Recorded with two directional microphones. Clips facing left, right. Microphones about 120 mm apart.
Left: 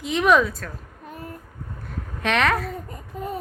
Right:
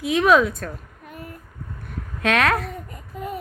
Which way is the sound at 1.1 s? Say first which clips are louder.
Left 1 dB; 35° left (ahead or behind).